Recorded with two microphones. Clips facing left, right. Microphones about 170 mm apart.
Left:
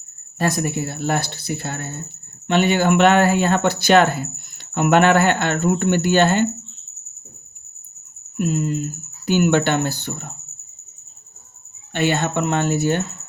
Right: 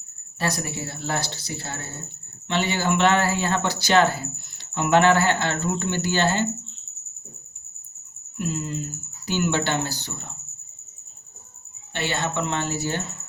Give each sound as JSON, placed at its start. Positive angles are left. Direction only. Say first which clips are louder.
{"t": 0.3, "sound": "speech", "louder": "left 6 dB", "side_deg": 50}
{"t": 8.4, "sound": "speech", "louder": "left 7 dB", "side_deg": 55}
{"t": 11.9, "sound": "speech", "louder": "left 6 dB", "side_deg": 50}